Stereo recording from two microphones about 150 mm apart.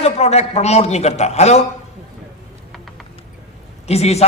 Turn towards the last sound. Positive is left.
turn(degrees=45)  # may be behind; listen again after turning